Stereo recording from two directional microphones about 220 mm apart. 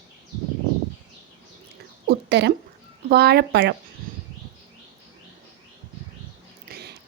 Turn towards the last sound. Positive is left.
turn(degrees=-45)  # may be behind; listen again after turning